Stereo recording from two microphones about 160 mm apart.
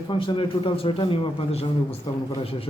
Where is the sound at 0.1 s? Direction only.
30° left (ahead or behind).